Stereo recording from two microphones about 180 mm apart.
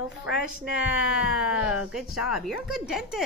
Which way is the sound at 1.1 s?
5° right (ahead or behind).